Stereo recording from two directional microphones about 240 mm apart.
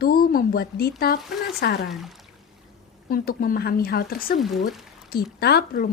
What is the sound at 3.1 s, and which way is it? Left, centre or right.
A woman's voice, left.